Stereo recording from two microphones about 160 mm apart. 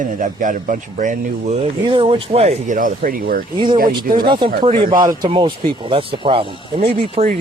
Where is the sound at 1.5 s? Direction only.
35° right (ahead or behind); by 3.5 s 60° right (ahead or behind).